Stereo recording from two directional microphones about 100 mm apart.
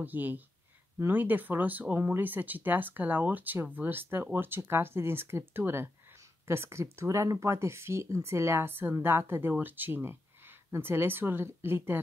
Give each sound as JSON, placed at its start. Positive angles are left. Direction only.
{"t": 0.0, "sound": "speech", "side_deg": -20}